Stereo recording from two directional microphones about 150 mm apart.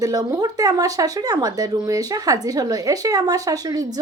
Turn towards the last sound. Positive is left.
turn(degrees=-25)  # may be behind; listen again after turning